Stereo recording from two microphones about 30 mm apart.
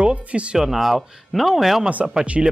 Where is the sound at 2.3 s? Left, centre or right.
Right.